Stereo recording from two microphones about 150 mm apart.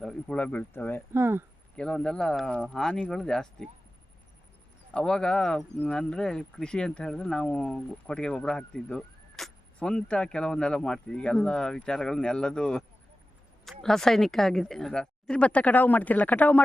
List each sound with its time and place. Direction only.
0.0 s speech: 5° left (ahead or behind)
1.1 s speech: 15° right (ahead or behind)
1.7 s speech: 5° left (ahead or behind)
4.9 s speech: 5° left (ahead or behind)